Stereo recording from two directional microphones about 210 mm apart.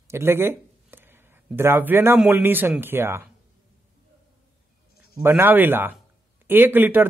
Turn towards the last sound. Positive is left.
turn(degrees=-10)  # may be behind; listen again after turning